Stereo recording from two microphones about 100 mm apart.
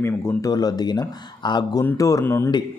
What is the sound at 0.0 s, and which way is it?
Speech, 25° left (ahead or behind).